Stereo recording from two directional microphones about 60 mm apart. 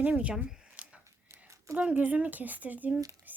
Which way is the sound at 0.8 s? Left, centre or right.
Centre.